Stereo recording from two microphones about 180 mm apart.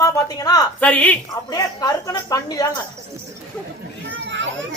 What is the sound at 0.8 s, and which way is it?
Speech, 5° left (ahead or behind).